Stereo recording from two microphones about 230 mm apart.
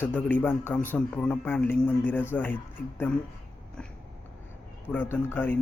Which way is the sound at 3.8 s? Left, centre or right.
Centre.